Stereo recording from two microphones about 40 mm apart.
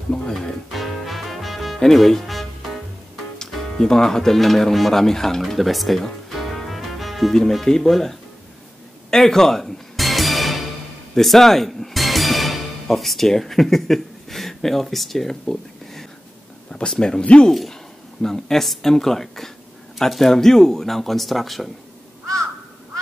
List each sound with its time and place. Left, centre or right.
0.3 s speech: centre
0.7 s music: centre
1.8 s speech: centre
3.3 s speech: centre
5.5 s music: centre
7.6 s speech: centre
9.1 s music: centre
11.1 s speech: centre
16.7 s speech: left
17.5 s speech: centre